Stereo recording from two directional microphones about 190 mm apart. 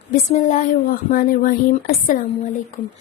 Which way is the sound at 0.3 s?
40° left (ahead or behind).